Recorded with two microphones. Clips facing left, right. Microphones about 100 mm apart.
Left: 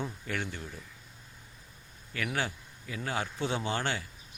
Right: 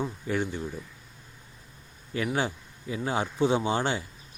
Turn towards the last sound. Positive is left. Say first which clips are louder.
# right 5 dB
turn(degrees=-15)  # may be behind; listen again after turning